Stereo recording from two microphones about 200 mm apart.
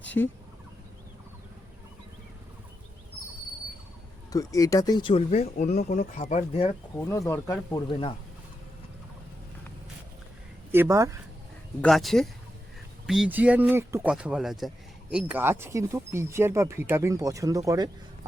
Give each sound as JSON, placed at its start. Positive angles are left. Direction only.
{"t": 0.0, "sound": "fowl", "side_deg": 5}
{"t": 4.3, "sound": "speech", "side_deg": 20}
{"t": 7.0, "sound": "speech", "side_deg": 15}
{"t": 10.7, "sound": "speech", "side_deg": -15}
{"t": 11.8, "sound": "speech", "side_deg": 0}